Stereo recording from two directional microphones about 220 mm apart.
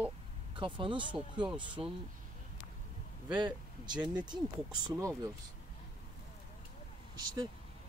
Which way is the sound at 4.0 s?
5° right (ahead or behind).